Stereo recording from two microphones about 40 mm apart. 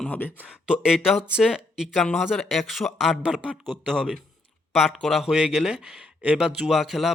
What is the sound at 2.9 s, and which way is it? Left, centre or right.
Speech, centre.